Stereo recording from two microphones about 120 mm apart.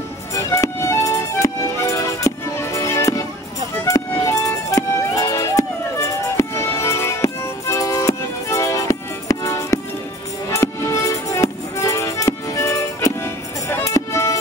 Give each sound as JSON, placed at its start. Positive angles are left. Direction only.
{"t": 0.3, "sound": "music", "side_deg": 25}